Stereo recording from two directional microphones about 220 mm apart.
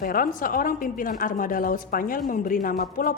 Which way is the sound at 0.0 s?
40° left (ahead or behind).